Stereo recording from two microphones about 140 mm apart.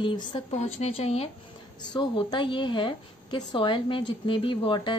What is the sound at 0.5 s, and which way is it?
Speech, 50° left (ahead or behind).